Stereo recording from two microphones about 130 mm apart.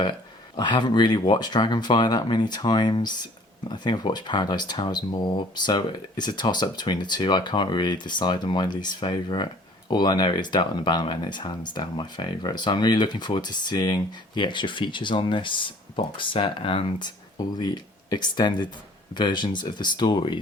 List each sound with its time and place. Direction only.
0.0 s speech: 35° left (ahead or behind)
17.3 s speech: 30° left (ahead or behind)